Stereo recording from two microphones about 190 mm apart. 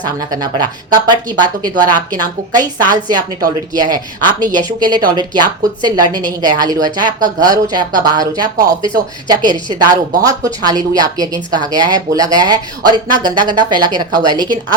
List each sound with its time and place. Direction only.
0.0 s a woman's voice: 20° right (ahead or behind)
3.8 s a woman's voice: 20° right (ahead or behind)